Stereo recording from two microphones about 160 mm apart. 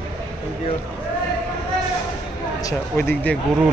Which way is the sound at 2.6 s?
20° left (ahead or behind).